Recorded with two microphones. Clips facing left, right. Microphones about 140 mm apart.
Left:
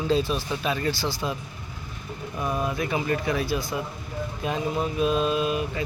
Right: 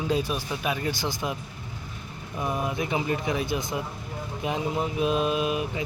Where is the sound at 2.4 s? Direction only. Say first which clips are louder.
Left 1 dB; 20° right (ahead or behind).